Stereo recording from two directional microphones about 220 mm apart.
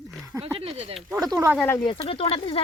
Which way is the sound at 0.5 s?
25° right (ahead or behind).